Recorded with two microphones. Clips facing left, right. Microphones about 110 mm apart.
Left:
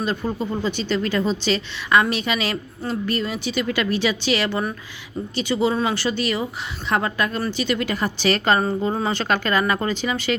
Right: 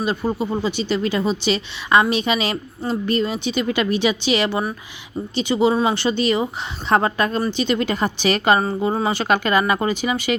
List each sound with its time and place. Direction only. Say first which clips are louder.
0.0 s a woman's voice: right 2 dB; 15° right (ahead or behind)